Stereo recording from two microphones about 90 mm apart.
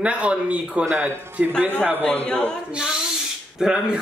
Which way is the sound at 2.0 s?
15° left (ahead or behind).